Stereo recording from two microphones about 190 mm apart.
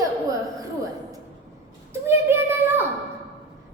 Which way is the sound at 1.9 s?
10° right (ahead or behind).